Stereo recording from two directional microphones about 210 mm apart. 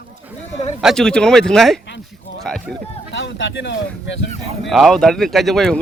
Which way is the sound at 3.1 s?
60° left (ahead or behind).